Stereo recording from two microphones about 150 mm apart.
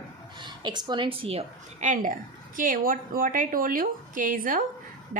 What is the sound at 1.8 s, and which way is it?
A woman's voice, 60° right (ahead or behind).